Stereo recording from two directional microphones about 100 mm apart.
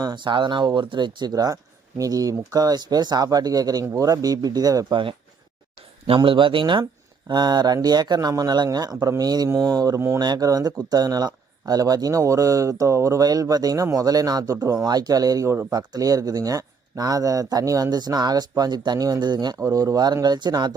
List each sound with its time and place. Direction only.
0.0 s speech: 45° right (ahead or behind)
6.1 s speech: 55° right (ahead or behind)
7.3 s speech: 45° right (ahead or behind)
19.5 s speech: 35° right (ahead or behind)